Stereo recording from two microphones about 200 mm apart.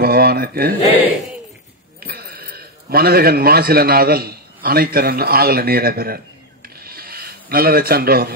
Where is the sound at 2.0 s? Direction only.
50° right (ahead or behind).